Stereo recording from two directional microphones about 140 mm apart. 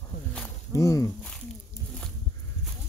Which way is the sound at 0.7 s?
20° left (ahead or behind).